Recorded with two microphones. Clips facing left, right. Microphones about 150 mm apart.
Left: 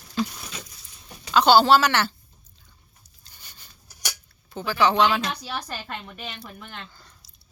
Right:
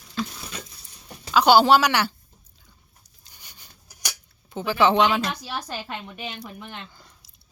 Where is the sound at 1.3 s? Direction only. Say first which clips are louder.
Even; 10° right (ahead or behind).